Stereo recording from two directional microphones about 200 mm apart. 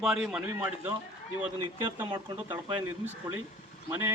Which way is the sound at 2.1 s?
20° right (ahead or behind).